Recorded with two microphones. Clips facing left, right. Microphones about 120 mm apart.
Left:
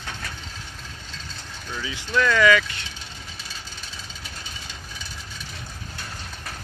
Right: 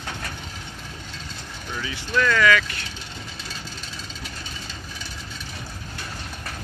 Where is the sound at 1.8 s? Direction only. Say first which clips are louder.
Even; 10° left (ahead or behind).